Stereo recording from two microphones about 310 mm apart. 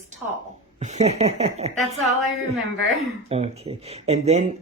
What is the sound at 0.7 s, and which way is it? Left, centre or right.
Speech, right.